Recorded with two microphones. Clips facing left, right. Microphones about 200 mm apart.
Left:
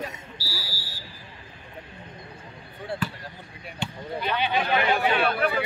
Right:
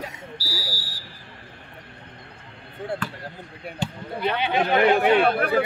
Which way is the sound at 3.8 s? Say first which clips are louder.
Right 4 dB; 40° right (ahead or behind).